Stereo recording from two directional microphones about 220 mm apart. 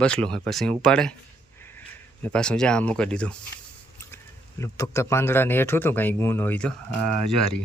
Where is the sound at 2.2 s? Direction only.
5° left (ahead or behind).